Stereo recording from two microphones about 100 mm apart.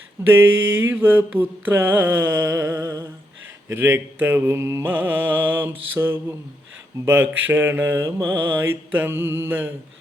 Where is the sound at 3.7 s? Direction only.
25° right (ahead or behind).